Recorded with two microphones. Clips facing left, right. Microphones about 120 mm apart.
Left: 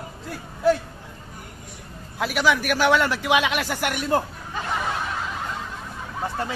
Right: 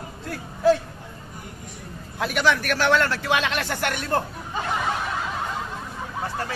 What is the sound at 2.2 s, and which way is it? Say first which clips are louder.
Speech: even; 5° left (ahead or behind).